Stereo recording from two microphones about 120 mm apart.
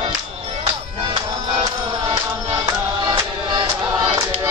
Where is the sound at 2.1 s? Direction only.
35° right (ahead or behind).